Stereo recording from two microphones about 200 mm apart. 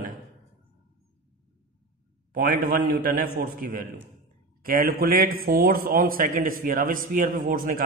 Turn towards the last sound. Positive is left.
turn(degrees=-45)  # may be behind; listen again after turning